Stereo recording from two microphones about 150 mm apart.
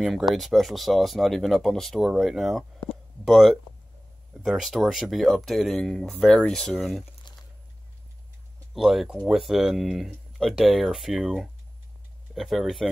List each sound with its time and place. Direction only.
0.3 s speech: centre (ahead or behind)
7.3 s a sound: 30° left (ahead or behind)
8.7 s speech: centre (ahead or behind)